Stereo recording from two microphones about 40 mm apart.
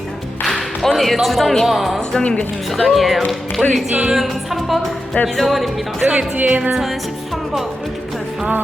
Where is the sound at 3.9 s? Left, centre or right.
Right.